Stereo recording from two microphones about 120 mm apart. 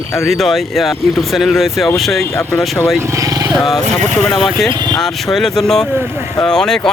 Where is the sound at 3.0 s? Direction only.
25° right (ahead or behind).